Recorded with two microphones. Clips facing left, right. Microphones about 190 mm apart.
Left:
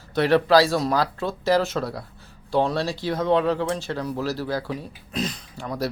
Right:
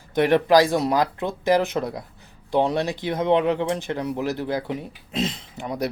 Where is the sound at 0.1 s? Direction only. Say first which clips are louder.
Right 1 dB; 15° right (ahead or behind).